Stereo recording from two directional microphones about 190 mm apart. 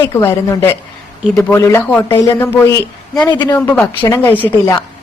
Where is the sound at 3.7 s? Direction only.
10° left (ahead or behind).